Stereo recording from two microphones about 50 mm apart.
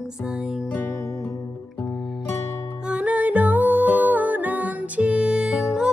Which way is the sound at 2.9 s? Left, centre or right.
Right.